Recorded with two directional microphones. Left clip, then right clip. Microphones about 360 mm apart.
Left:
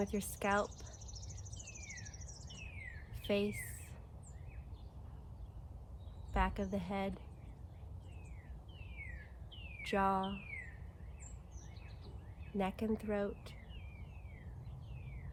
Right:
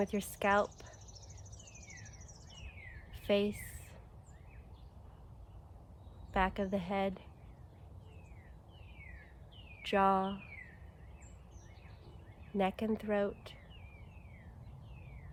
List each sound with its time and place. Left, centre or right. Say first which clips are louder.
0.0 s speech: right 4 dB; right
3.2 s bird: right 4 dB; right
6.3 s speech: right 4 dB; right
9.8 s speech: right 5 dB; right
12.5 s speech: right 4 dB; right